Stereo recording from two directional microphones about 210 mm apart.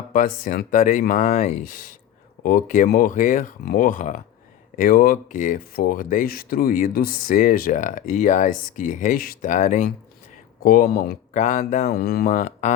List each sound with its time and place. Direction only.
0.1 s speech: 40° left (ahead or behind)